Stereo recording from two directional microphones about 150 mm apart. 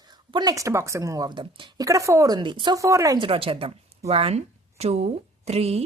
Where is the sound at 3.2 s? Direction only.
40° right (ahead or behind).